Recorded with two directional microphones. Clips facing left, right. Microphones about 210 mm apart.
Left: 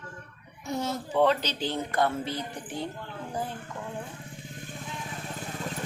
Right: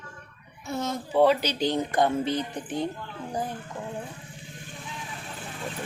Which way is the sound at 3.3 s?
15° right (ahead or behind).